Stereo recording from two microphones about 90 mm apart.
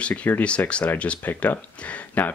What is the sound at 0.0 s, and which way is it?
Speech, 15° left (ahead or behind).